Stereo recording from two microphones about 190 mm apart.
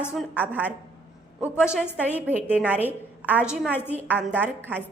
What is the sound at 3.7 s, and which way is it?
Speech, 10° left (ahead or behind).